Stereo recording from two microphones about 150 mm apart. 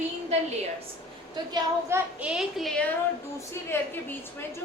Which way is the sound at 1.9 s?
15° right (ahead or behind).